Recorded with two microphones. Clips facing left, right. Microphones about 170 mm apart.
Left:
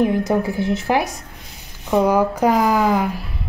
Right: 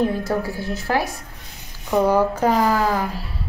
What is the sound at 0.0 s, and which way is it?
A woman's voice, 20° left (ahead or behind).